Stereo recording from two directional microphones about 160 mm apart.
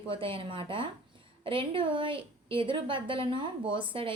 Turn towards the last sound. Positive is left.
turn(degrees=-30)  # may be behind; listen again after turning